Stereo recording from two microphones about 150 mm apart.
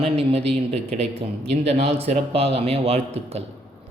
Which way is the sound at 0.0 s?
40° right (ahead or behind).